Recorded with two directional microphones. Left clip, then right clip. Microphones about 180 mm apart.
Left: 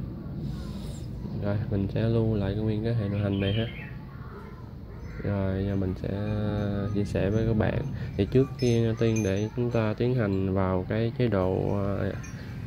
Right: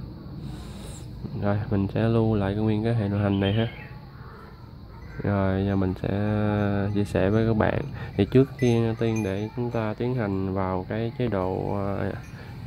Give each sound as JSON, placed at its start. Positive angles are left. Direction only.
{"t": 1.4, "sound": "speech", "side_deg": -15}
{"t": 5.2, "sound": "speech", "side_deg": -20}